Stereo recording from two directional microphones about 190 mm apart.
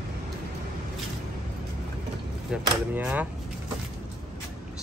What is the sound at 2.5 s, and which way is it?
Speech, 10° right (ahead or behind).